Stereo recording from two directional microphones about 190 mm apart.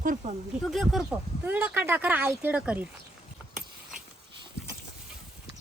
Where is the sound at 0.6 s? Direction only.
Centre (ahead or behind).